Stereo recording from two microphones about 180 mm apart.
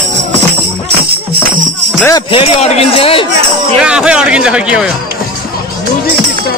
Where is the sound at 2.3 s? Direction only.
30° left (ahead or behind).